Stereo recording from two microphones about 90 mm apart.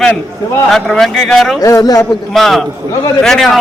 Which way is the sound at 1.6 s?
40° left (ahead or behind).